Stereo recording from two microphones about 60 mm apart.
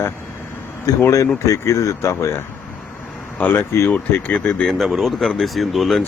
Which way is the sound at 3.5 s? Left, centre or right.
Left.